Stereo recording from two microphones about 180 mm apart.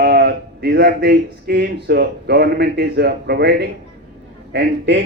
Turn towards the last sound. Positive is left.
turn(degrees=-75)  # may be behind; listen again after turning